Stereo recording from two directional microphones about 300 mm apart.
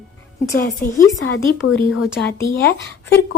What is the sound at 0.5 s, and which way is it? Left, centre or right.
Speech, left.